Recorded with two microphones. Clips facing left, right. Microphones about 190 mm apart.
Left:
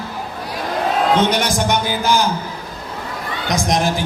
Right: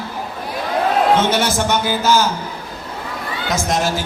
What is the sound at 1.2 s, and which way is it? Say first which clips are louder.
A man's voice: even; 15° left (ahead or behind).